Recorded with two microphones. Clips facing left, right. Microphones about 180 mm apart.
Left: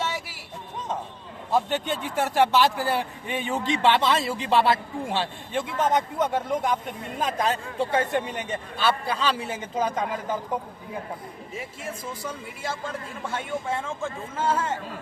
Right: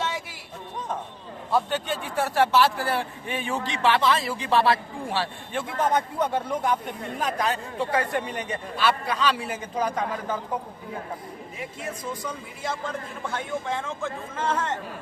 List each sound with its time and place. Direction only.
0.0 s a sound: 5° left (ahead or behind)
1.5 s a man's voice: 20° left (ahead or behind)
12.2 s speech: 5° left (ahead or behind)